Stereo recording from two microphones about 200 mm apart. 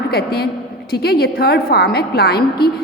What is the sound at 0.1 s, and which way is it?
A woman's voice, 50° left (ahead or behind).